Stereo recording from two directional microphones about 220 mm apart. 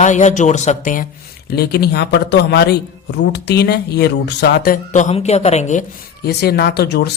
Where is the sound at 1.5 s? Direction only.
45° left (ahead or behind); by 5.8 s 30° left (ahead or behind).